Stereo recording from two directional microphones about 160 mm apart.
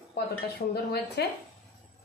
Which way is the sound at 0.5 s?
90° left.